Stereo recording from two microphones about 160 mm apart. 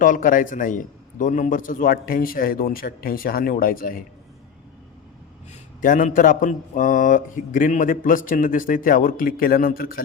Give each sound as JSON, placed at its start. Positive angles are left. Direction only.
{"t": 0.0, "sound": "speech", "side_deg": 55}
{"t": 5.8, "sound": "speech", "side_deg": 55}